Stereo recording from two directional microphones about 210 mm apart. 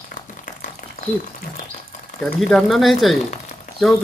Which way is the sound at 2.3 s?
Centre (ahead or behind).